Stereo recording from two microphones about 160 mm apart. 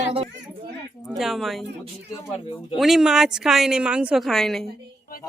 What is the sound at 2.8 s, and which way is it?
A woman's voice, centre (ahead or behind).